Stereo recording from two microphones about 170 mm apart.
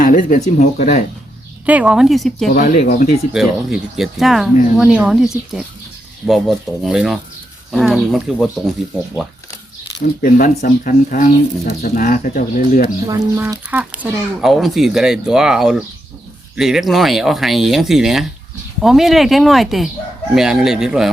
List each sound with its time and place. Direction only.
0.0 s speech: 50° left (ahead or behind)
1.6 s speech: 10° right (ahead or behind)
2.5 s speech: 50° left (ahead or behind)
3.3 s speech: centre (ahead or behind)
10.2 s speech: 50° left (ahead or behind)
13.1 s speech: 20° right (ahead or behind); by 21.1 s 5° right (ahead or behind)